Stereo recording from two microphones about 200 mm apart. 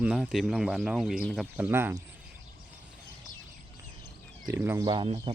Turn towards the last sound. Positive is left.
turn(degrees=-25)  # may be behind; listen again after turning